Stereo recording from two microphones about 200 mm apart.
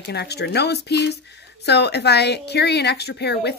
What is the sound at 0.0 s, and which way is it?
A woman's voice, 55° left (ahead or behind).